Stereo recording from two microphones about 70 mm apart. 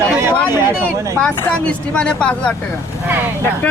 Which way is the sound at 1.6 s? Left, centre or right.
Centre.